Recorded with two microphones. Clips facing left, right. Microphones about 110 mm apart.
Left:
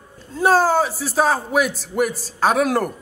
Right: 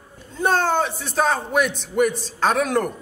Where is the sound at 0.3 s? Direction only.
5° left (ahead or behind).